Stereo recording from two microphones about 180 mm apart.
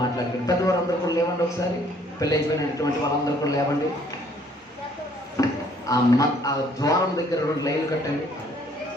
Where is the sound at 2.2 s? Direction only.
20° left (ahead or behind).